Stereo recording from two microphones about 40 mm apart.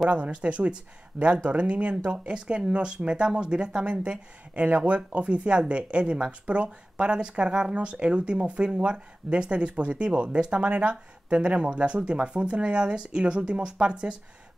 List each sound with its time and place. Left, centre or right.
0.1 s speech: right